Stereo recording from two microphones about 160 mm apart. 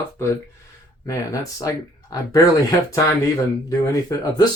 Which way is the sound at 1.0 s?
20° left (ahead or behind).